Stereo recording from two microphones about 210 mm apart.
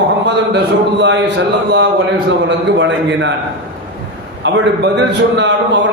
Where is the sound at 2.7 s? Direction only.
60° right (ahead or behind).